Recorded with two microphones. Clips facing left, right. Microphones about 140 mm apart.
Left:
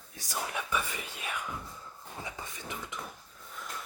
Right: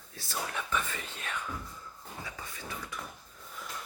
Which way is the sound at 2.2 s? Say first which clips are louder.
Left 2 dB; 20° left (ahead or behind).